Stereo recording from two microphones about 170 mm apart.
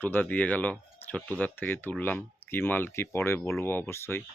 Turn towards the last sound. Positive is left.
turn(degrees=15)  # may be behind; listen again after turning